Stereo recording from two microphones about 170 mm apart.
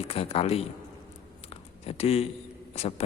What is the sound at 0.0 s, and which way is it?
Speech, 35° left (ahead or behind).